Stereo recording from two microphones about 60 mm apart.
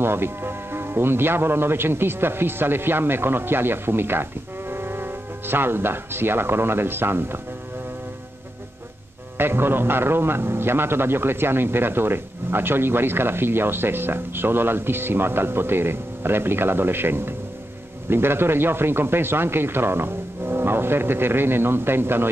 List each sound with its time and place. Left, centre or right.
0.0 s a man's voice: right
9.4 s a man's voice: right